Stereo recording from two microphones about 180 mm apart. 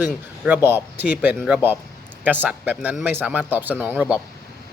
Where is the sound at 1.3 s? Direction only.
Centre (ahead or behind).